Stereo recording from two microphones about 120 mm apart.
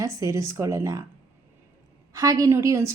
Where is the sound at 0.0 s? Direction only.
25° right (ahead or behind).